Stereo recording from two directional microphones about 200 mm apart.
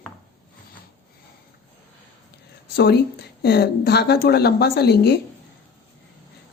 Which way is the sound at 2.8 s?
55° left (ahead or behind).